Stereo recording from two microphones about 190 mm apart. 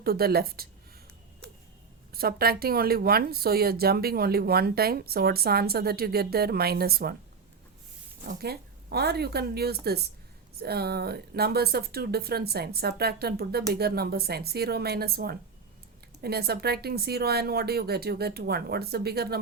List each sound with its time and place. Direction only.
0.0 s speech: 55° right (ahead or behind)
2.1 s speech: 55° right (ahead or behind)
8.3 s speech: 55° right (ahead or behind)